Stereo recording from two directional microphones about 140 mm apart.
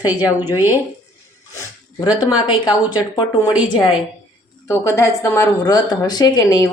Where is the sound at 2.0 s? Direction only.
30° left (ahead or behind).